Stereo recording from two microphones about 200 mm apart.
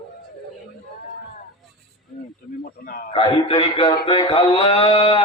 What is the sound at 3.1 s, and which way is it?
Speech, 20° left (ahead or behind).